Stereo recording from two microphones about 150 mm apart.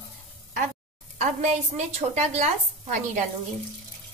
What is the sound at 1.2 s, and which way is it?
A woman's voice, 55° right (ahead or behind).